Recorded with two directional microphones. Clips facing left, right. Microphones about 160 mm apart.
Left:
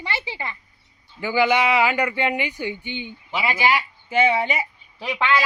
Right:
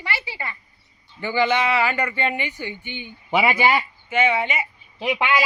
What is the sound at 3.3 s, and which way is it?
Speech, 65° right (ahead or behind).